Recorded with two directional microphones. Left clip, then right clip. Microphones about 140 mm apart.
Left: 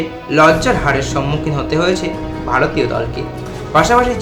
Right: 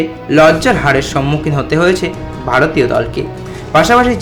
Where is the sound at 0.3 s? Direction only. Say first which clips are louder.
Right 2 dB; 40° right (ahead or behind).